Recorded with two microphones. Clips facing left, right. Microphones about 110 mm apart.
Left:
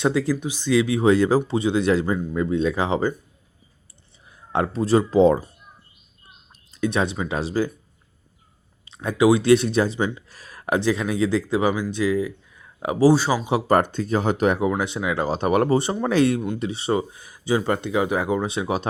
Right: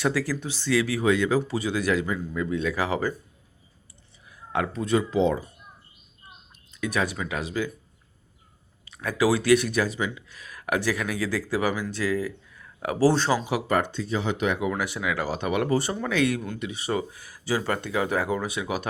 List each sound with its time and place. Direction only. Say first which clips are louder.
0.0 s speech: left 5 dB; 20° left (ahead or behind)
1.1 s speech: left 5 dB; 35° left (ahead or behind)
1.5 s speech: left 5 dB; 25° left (ahead or behind)
4.3 s speech: left 4 dB; 30° left (ahead or behind)
6.7 s speech: left 4 dB; 30° left (ahead or behind)
8.8 s speech: left 5 dB; 25° left (ahead or behind)
13.1 s speech: left 2 dB; 10° left (ahead or behind)
13.7 s speech: left 7 dB; 45° left (ahead or behind)
14.7 s speech: left 4 dB; 25° left (ahead or behind); by 15.7 s 40° left (ahead or behind)
15.7 s speech: left 5 dB; 25° left (ahead or behind)